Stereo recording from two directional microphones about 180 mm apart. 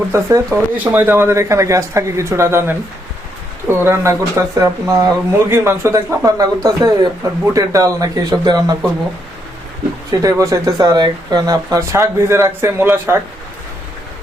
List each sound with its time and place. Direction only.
0.1 s speech: 15° right (ahead or behind)
10.1 s speech: 20° right (ahead or behind)